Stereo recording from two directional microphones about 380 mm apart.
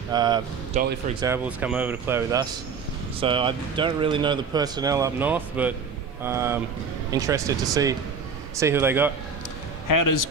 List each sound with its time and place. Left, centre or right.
0.1 s speech: centre
9.8 s a man's voice: left